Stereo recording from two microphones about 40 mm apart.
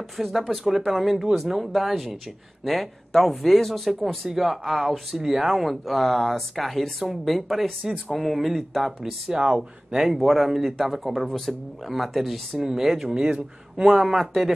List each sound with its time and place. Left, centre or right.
0.2 s speech: centre
9.0 s speech: centre
11.2 s speech: centre
11.9 s speech: centre
14.1 s speech: centre